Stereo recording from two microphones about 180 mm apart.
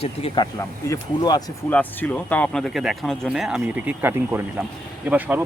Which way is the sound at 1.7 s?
10° left (ahead or behind).